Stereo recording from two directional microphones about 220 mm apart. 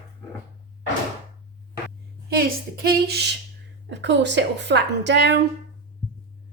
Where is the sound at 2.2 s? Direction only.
45° right (ahead or behind).